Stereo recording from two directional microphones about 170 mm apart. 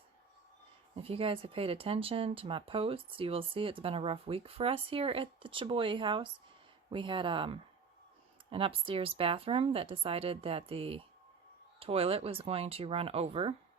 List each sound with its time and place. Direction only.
0.9 s speech: 35° right (ahead or behind)